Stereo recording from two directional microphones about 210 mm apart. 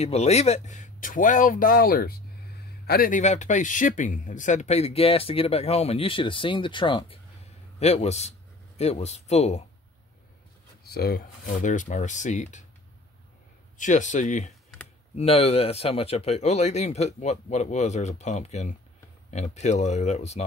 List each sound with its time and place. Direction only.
0.0 s speech: 30° left (ahead or behind)
10.8 s speech: 50° left (ahead or behind)
13.7 s speech: 35° left (ahead or behind)